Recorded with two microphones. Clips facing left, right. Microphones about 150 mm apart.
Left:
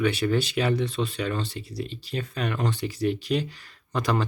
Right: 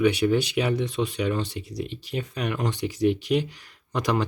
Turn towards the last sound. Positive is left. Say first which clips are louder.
# right 1 dB
turn(degrees=-15)  # may be behind; listen again after turning